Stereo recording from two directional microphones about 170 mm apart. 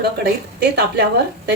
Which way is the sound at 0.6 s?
75° right (ahead or behind).